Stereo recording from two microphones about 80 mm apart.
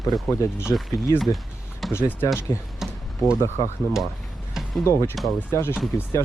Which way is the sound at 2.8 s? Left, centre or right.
Centre.